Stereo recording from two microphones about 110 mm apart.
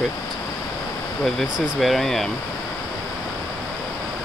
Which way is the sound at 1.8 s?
Centre (ahead or behind).